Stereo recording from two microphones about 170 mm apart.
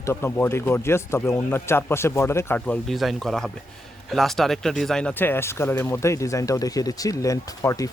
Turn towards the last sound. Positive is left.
turn(degrees=20)  # may be behind; listen again after turning